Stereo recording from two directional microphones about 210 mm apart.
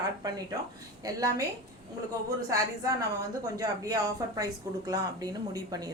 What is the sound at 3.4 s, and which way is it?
A woman's voice, 15° right (ahead or behind).